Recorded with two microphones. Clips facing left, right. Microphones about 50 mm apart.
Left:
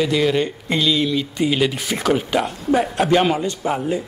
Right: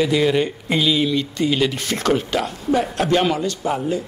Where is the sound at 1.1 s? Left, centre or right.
Centre.